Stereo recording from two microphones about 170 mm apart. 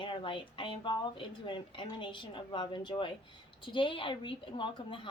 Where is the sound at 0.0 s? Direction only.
30° left (ahead or behind).